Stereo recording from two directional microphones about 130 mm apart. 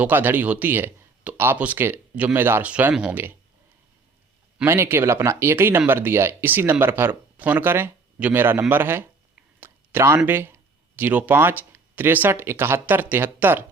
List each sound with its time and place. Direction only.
0.0 s speech: 15° right (ahead or behind)
4.6 s speech: 20° right (ahead or behind)
9.6 s a sound: 15° right (ahead or behind)
10.2 s speech: 15° right (ahead or behind)